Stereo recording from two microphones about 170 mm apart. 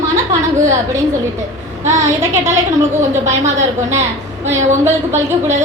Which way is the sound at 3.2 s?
45° right (ahead or behind).